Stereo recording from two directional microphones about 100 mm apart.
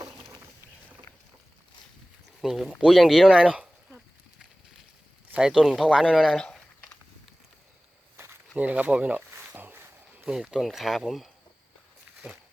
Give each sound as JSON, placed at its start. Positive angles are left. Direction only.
{"t": 2.4, "sound": "speech", "side_deg": -5}
{"t": 5.3, "sound": "speech", "side_deg": -5}
{"t": 8.1, "sound": "walk", "side_deg": -25}
{"t": 8.5, "sound": "speech", "side_deg": -15}
{"t": 9.6, "sound": "a sound", "side_deg": -20}
{"t": 10.2, "sound": "speech", "side_deg": -5}